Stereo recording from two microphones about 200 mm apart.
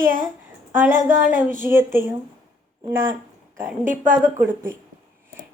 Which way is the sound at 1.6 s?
10° right (ahead or behind).